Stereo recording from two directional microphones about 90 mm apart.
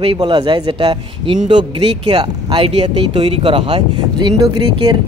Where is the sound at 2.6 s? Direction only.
70° right (ahead or behind).